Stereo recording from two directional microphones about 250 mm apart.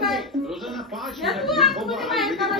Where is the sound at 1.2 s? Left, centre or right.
Centre.